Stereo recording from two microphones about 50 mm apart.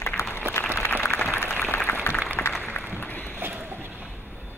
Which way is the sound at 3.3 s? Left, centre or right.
Right.